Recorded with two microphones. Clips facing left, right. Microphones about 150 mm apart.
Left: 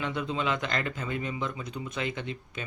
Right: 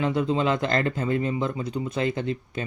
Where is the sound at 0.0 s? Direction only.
35° right (ahead or behind).